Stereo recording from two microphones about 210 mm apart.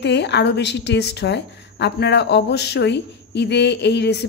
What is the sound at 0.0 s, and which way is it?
A woman's voice, 55° left (ahead or behind).